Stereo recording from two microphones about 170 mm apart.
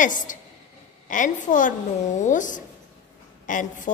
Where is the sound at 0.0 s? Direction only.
50° left (ahead or behind).